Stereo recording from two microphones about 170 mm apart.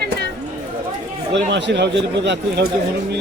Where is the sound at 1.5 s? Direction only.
90° right.